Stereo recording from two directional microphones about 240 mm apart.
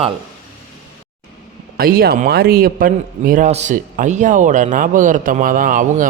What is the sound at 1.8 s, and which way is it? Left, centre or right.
A man's voice, right.